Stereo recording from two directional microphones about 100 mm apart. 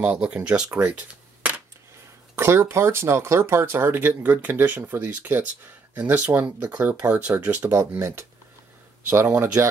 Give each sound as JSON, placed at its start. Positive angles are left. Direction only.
{"t": 0.0, "sound": "speech", "side_deg": -10}
{"t": 0.8, "sound": "a sound", "side_deg": -15}
{"t": 2.3, "sound": "speech", "side_deg": -25}
{"t": 9.6, "sound": "speech", "side_deg": -25}